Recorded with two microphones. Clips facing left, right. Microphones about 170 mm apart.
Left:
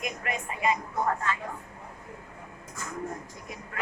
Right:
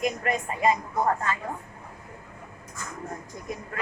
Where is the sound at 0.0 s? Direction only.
40° right (ahead or behind).